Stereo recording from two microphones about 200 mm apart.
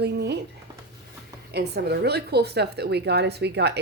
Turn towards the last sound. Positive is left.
turn(degrees=-55)  # may be behind; listen again after turning